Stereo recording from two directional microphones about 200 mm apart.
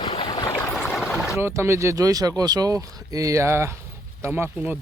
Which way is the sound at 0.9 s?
10° left (ahead or behind).